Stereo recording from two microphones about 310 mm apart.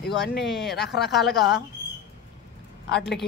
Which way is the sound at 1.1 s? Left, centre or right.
Centre.